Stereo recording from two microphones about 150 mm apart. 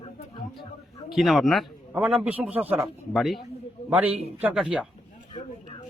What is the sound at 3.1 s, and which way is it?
Speech, centre (ahead or behind).